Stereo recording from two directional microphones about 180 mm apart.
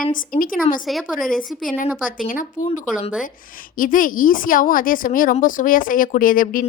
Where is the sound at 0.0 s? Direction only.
50° left (ahead or behind).